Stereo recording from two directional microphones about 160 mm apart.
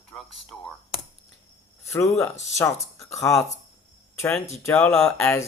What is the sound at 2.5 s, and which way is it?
Speech, 20° left (ahead or behind).